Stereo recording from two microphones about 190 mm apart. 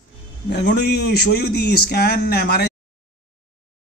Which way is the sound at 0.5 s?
55° left (ahead or behind).